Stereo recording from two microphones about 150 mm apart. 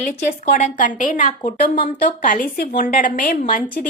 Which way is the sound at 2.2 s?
65° left (ahead or behind).